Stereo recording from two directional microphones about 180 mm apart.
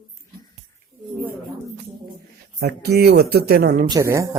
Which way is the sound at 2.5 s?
65° right (ahead or behind).